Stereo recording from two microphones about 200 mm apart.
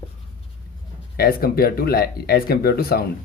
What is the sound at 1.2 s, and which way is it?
Speech, 50° left (ahead or behind).